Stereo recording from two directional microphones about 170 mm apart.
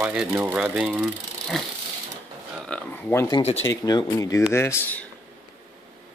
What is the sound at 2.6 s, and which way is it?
Speech, 10° left (ahead or behind).